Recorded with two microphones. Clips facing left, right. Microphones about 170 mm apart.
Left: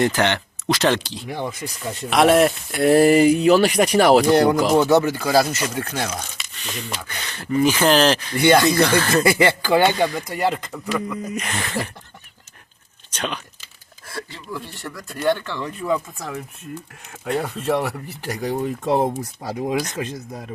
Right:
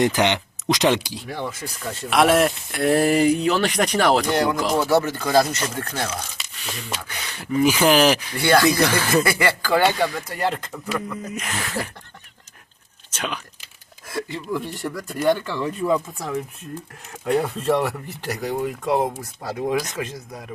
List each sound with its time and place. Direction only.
0.0 s speech: 15° right (ahead or behind)
1.3 s speech: 15° left (ahead or behind)
2.0 s speech: centre (ahead or behind)
4.3 s speech: 35° left (ahead or behind)
4.8 s speech: 20° left (ahead or behind)
6.3 s speech: 5° right (ahead or behind)
8.4 s speech: 20° left (ahead or behind)
10.8 s speech: centre (ahead or behind)
13.1 s speech: 5° right (ahead or behind)
14.1 s speech: 20° right (ahead or behind)
15.1 s speech: 5° right (ahead or behind)
17.6 s speech: 5° left (ahead or behind)
18.6 s speech: 25° left (ahead or behind)